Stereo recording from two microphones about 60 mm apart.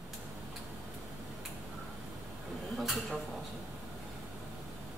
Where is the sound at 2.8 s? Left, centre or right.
Centre.